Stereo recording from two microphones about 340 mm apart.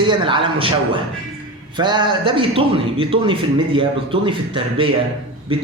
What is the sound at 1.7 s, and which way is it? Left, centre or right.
A man's voice, centre.